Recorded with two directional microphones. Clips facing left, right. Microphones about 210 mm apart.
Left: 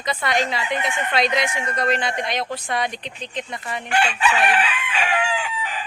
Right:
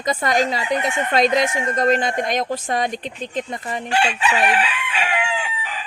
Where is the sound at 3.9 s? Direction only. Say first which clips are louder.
Even; 25° right (ahead or behind).